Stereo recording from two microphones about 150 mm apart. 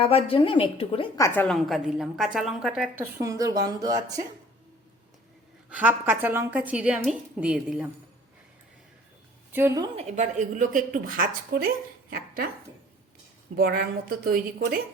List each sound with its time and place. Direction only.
0.0 s a woman's voice: 40° left (ahead or behind)
1.2 s a woman's voice: 15° left (ahead or behind)
1.5 s a woman's voice: centre (ahead or behind)
2.9 s a woman's voice: 20° right (ahead or behind)
5.7 s a woman's voice: 10° right (ahead or behind)
9.5 s speech: 15° right (ahead or behind)
10.0 s a woman's voice: 50° right (ahead or behind); by 11.7 s 65° right (ahead or behind)
12.1 s speech: 90° right
13.6 s a woman's voice: 80° right